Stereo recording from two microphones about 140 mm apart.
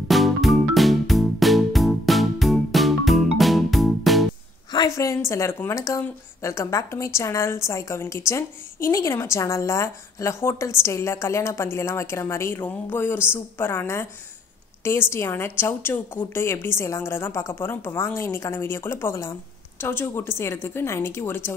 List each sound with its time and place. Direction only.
0.1 s music: centre (ahead or behind)
4.7 s a woman's voice: 25° left (ahead or behind)